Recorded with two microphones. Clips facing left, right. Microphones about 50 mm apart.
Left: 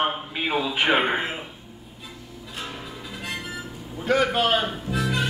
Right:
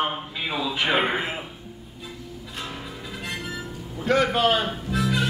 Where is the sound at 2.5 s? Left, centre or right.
Centre.